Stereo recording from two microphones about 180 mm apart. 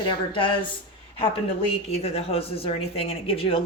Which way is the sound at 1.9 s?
35° left (ahead or behind).